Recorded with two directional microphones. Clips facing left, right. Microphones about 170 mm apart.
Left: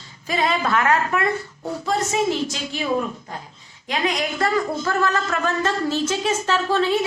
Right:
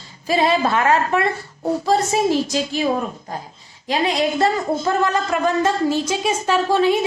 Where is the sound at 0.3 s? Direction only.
30° right (ahead or behind).